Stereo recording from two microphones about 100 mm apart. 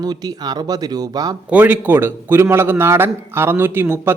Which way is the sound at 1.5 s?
15° right (ahead or behind).